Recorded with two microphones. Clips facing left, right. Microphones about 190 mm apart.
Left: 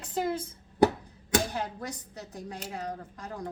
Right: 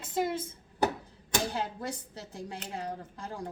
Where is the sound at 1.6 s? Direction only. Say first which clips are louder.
Even; 30° right (ahead or behind).